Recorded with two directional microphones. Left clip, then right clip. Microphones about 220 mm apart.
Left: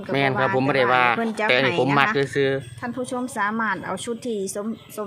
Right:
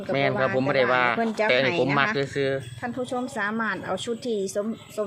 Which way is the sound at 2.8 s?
30° left (ahead or behind).